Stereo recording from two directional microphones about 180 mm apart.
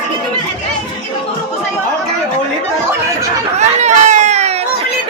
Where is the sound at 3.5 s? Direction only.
40° right (ahead or behind).